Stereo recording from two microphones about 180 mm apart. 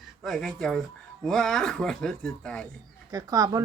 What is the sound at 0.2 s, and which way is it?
Speech, centre (ahead or behind).